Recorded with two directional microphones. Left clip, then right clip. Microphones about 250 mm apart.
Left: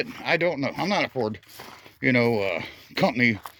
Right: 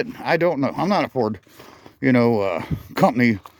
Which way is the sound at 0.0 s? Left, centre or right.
Right.